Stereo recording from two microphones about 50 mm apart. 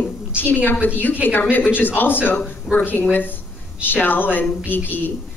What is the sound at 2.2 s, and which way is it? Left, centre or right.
Speech, left.